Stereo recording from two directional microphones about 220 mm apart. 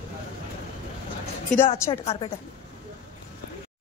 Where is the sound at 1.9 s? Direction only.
25° left (ahead or behind).